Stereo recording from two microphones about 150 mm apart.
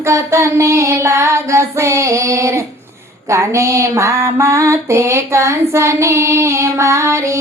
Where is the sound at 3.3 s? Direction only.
20° right (ahead or behind).